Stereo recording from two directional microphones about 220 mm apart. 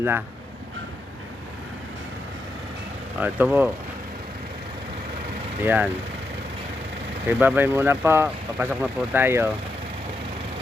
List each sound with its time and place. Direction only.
3.2 s speech: 10° right (ahead or behind)
5.6 s speech: 10° right (ahead or behind)
7.3 s speech: 10° right (ahead or behind)